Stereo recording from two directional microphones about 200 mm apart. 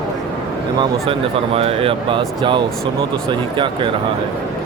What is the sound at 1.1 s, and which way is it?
Speech, 30° right (ahead or behind).